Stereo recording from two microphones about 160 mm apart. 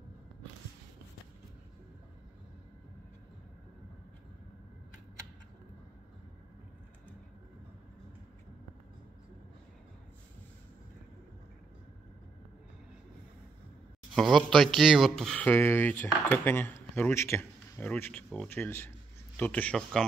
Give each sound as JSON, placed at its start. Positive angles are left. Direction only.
{"t": 14.1, "sound": "speech", "side_deg": 0}